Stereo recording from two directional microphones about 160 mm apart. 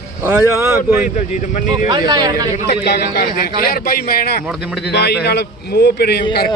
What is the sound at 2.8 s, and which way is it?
A man's voice, 80° left.